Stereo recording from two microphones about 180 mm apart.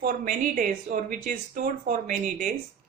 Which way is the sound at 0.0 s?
50° right (ahead or behind).